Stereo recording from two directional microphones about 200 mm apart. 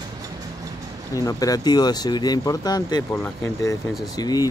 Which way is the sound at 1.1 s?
20° left (ahead or behind).